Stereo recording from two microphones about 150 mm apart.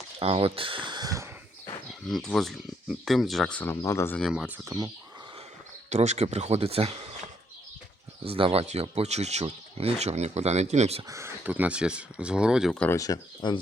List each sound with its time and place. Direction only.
0.2 s speech: 40° right (ahead or behind); by 1.3 s 25° right (ahead or behind)
1.9 s speech: centre (ahead or behind); by 4.2 s 15° left (ahead or behind)
4.2 s speech: 5° right (ahead or behind)
5.9 s speech: 50° right (ahead or behind)
8.2 s speech: 40° right (ahead or behind)
11.1 s speech: 15° right (ahead or behind)
12.8 s speech: 20° left (ahead or behind)